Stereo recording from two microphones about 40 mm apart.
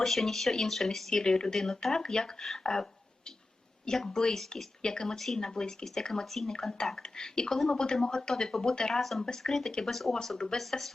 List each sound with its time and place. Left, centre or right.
0.0 s speech: centre
1.1 s speech: centre
3.8 s speech: centre
9.0 s speech: centre
10.3 s speech: centre
10.6 s speech: centre